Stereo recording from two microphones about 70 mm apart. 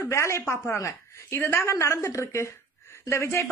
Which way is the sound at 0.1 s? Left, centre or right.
Left.